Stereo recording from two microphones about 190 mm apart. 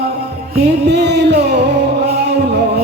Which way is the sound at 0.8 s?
65° right (ahead or behind).